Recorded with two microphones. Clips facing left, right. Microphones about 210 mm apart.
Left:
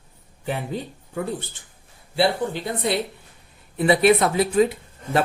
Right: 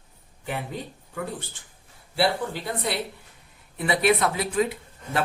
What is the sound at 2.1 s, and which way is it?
Speech, 20° left (ahead or behind).